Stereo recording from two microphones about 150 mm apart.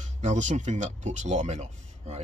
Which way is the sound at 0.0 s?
55° right (ahead or behind).